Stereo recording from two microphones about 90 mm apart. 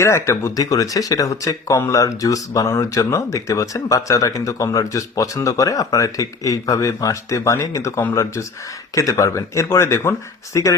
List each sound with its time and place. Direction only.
0.0 s speech: 30° left (ahead or behind)